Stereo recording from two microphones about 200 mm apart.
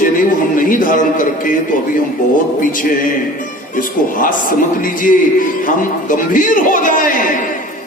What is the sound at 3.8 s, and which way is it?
A man's voice, 45° left (ahead or behind).